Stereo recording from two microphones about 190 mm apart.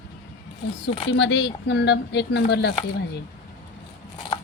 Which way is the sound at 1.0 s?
70° left (ahead or behind).